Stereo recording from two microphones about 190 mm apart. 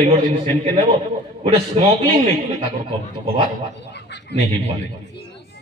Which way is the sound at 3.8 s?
65° left (ahead or behind).